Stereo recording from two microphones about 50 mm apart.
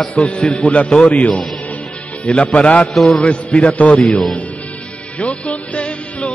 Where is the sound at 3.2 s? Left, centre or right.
Left.